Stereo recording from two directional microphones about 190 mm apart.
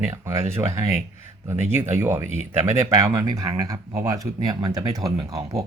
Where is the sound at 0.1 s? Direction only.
15° right (ahead or behind).